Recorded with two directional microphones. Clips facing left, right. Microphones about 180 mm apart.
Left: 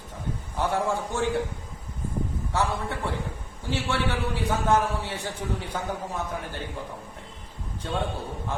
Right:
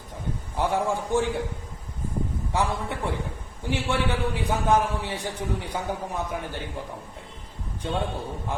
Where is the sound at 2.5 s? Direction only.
15° right (ahead or behind).